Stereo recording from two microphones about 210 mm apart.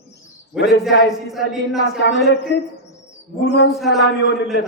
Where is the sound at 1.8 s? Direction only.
60° left (ahead or behind).